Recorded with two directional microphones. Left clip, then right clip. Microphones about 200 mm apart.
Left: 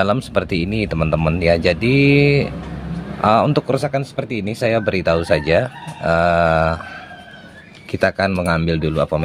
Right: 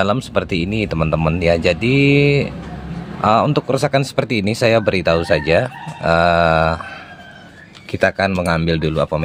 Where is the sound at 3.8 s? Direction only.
20° right (ahead or behind).